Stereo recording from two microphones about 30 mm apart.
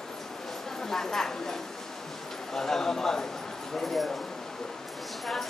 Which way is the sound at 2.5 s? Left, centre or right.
Centre.